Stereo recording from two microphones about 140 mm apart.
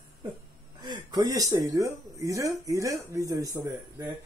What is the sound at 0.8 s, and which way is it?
Speech, 30° right (ahead or behind).